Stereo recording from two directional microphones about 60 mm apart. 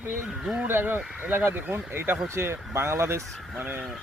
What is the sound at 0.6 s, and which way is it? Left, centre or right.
Speech, right.